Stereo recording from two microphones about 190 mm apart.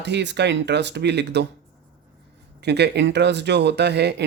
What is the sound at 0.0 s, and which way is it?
Speech, 65° right (ahead or behind).